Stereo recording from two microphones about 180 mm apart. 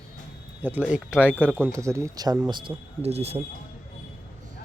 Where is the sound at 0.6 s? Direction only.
10° right (ahead or behind); by 3.3 s 35° right (ahead or behind).